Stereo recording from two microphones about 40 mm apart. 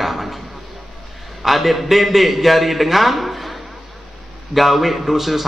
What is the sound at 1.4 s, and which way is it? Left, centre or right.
A man's voice, centre.